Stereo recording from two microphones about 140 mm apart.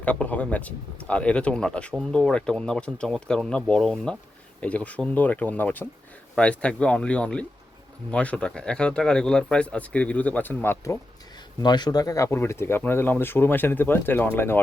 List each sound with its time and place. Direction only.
0.0 s speech: 10° left (ahead or behind)
11.6 s speech: 30° left (ahead or behind)